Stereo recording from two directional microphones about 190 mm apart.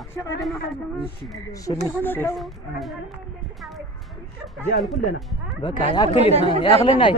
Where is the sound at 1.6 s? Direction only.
15° left (ahead or behind).